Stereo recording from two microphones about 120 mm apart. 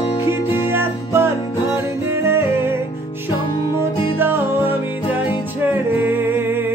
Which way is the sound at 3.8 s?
20° right (ahead or behind).